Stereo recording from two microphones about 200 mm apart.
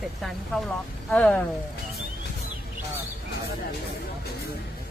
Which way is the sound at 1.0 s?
5° left (ahead or behind).